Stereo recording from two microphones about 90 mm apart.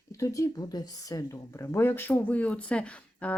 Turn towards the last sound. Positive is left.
turn(degrees=15)  # may be behind; listen again after turning